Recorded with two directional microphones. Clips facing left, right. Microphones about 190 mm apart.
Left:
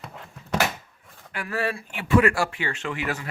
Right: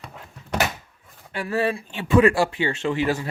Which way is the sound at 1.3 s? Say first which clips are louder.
Right 5 dB; 25° right (ahead or behind).